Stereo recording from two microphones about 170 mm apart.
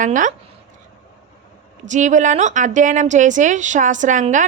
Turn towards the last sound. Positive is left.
turn(degrees=-45)  # may be behind; listen again after turning